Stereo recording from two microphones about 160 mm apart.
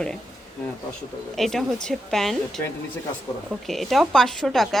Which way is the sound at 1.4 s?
Centre (ahead or behind).